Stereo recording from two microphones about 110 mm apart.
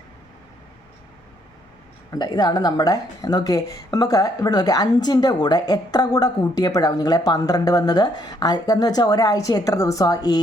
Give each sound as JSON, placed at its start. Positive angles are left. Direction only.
{"t": 2.1, "sound": "speech", "side_deg": 40}